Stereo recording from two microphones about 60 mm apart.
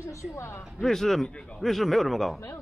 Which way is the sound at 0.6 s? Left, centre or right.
Centre.